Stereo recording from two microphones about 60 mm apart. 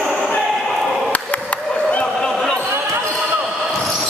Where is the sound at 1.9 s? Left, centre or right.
Centre.